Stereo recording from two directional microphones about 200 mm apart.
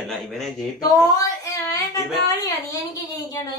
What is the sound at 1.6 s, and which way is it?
Child singing, 15° left (ahead or behind).